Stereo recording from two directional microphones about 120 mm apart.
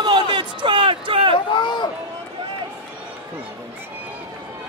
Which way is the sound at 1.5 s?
40° left (ahead or behind).